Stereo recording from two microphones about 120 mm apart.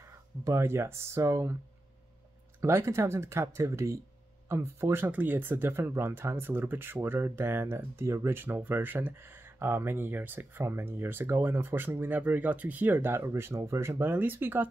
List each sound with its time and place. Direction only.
0.4 s speech: 25° right (ahead or behind)
2.6 s speech: 20° right (ahead or behind)